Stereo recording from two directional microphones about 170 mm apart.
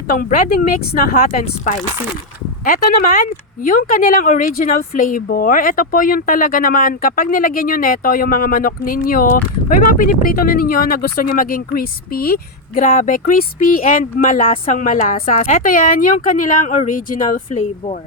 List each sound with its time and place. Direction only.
0.1 s speech: 50° left (ahead or behind)